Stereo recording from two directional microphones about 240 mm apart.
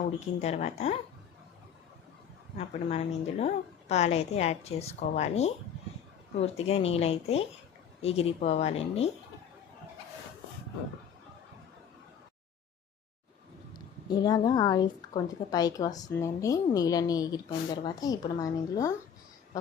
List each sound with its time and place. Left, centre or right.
0.4 s a woman's voice: left
2.6 s a woman's voice: left
13.7 s speech: centre